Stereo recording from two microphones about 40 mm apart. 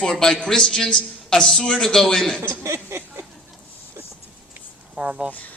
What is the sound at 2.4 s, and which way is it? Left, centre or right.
Speech, right.